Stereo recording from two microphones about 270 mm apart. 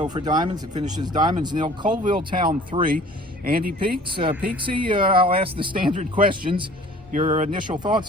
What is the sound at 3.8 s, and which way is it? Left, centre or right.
Speech, centre.